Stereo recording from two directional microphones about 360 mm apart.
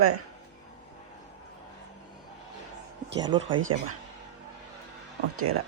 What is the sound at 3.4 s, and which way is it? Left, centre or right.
Speech, right.